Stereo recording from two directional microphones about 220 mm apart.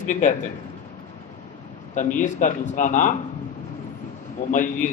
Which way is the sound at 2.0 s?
35° left (ahead or behind).